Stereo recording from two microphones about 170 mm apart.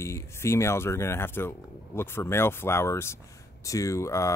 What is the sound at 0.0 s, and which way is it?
Speech, 15° left (ahead or behind).